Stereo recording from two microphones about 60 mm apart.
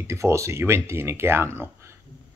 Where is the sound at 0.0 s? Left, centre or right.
Right.